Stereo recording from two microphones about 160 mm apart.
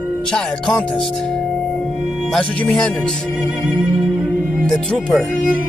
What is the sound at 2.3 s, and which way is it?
Speech, 5° left (ahead or behind).